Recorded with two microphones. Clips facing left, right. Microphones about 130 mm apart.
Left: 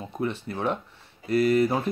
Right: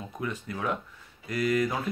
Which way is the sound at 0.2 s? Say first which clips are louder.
Left 5 dB; 30° left (ahead or behind).